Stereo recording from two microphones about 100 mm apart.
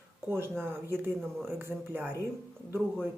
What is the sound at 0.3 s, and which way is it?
Speech, 25° right (ahead or behind).